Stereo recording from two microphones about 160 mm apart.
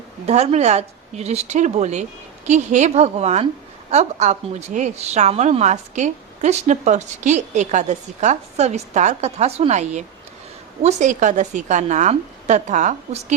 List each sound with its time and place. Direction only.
0.3 s a woman's voice: 45° right (ahead or behind)